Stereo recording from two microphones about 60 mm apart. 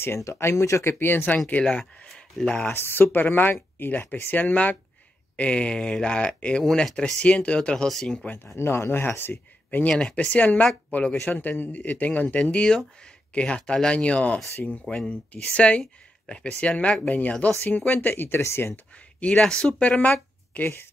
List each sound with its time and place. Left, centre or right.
0.0 s speech: left
0.9 s speech: left
1.5 s speech: left
2.5 s speech: left; by 8.3 s centre
8.5 s speech: left
9.8 s speech: centre; by 18.8 s left
19.1 s speech: centre
20.0 s speech: left